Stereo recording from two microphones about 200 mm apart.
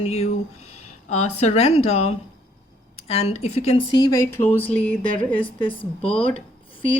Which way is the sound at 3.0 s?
30° left (ahead or behind).